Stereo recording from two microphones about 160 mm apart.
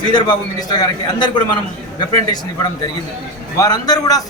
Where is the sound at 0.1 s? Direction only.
25° left (ahead or behind).